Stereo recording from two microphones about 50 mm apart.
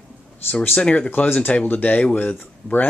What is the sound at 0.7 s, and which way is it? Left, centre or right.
Speech, left.